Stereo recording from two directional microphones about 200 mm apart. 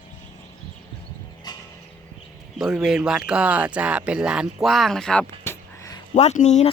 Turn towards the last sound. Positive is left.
turn(degrees=35)  # may be behind; listen again after turning